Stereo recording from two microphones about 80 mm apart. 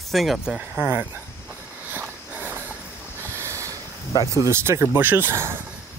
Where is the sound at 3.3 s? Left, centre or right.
Right.